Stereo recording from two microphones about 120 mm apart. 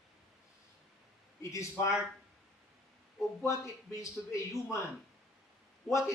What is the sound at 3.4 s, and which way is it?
A man's voice, 25° left (ahead or behind).